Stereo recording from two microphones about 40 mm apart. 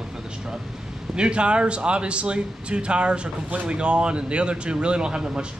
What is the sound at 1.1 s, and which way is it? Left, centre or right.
A man's voice, right.